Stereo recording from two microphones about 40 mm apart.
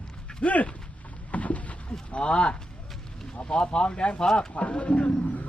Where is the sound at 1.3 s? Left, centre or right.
Left.